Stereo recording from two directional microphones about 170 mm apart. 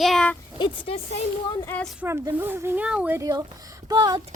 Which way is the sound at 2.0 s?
15° right (ahead or behind).